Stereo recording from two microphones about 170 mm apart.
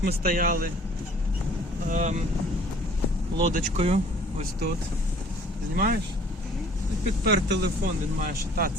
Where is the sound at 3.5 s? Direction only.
40° right (ahead or behind).